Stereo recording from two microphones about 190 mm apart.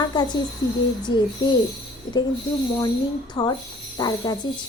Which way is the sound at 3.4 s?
25° left (ahead or behind).